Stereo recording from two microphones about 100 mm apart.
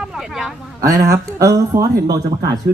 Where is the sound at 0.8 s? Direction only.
30° right (ahead or behind).